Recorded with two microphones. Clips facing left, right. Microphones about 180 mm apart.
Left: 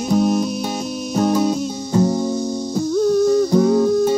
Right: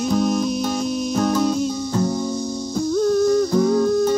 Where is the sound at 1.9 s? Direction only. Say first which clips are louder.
Left 8 dB; 20° left (ahead or behind).